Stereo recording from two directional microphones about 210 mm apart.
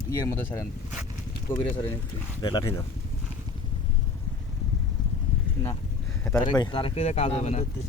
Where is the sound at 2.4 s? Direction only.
20° left (ahead or behind).